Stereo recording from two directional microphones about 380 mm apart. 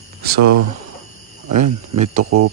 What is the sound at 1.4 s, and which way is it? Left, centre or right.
Speech, right.